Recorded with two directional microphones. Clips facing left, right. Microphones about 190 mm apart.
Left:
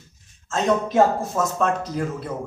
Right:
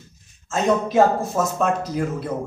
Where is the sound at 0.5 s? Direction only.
5° right (ahead or behind).